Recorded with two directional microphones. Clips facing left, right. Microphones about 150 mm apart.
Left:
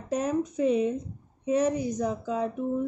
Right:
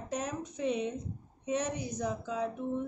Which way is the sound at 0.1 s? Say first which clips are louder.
Left 10 dB; 45° left (ahead or behind).